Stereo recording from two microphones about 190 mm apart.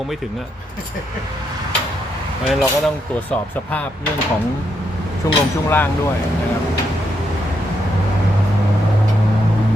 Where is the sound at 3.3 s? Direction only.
5° left (ahead or behind).